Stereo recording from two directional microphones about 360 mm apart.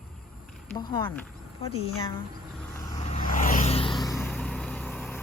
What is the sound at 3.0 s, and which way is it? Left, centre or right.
Vehicle, centre.